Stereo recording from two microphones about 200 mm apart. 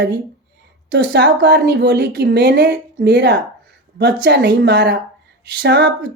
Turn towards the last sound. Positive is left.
turn(degrees=-60)  # may be behind; listen again after turning